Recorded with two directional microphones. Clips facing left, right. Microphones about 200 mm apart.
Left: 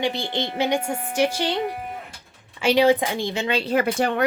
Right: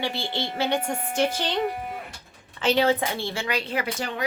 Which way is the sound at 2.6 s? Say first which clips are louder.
Left 4 dB; 10° left (ahead or behind).